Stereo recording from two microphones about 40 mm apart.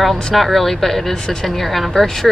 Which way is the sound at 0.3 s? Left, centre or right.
Centre.